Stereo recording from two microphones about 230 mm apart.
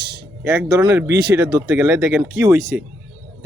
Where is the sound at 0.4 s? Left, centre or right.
Centre.